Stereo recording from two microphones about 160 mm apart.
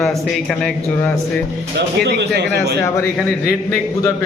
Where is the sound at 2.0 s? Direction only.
90° right.